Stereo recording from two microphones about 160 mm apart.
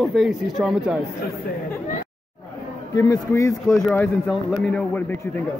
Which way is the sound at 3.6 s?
Centre (ahead or behind).